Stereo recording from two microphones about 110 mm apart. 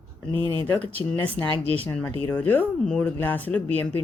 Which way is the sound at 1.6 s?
65° right (ahead or behind).